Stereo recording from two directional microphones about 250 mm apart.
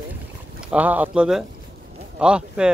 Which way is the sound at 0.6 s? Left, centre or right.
Centre.